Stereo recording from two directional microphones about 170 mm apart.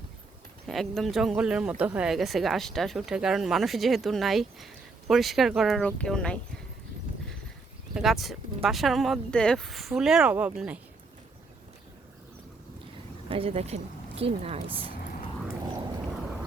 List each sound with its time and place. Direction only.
0.7 s speech: centre (ahead or behind)
7.9 s speech: centre (ahead or behind)
13.3 s a woman's voice: 35° right (ahead or behind)